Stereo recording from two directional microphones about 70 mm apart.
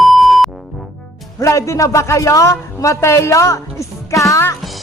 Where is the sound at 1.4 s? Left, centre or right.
Left.